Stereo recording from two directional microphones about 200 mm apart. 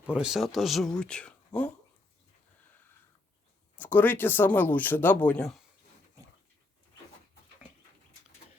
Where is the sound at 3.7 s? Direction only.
10° left (ahead or behind).